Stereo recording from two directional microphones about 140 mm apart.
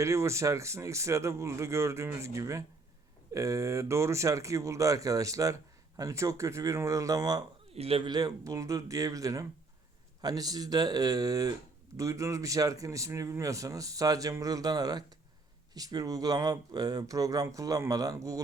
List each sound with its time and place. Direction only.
0.0 s a man's voice: 20° right (ahead or behind)
7.7 s a man's voice: 45° right (ahead or behind); by 18.3 s 25° right (ahead or behind)